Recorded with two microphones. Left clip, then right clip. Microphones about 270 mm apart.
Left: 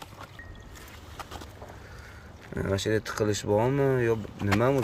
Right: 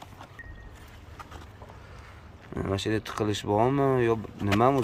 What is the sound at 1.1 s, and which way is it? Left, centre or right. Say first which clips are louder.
Boat: left 4 dB; left.